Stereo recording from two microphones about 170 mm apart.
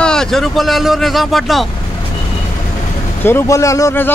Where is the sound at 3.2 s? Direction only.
15° left (ahead or behind).